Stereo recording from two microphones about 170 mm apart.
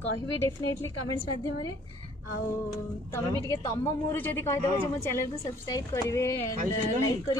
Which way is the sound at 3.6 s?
15° left (ahead or behind).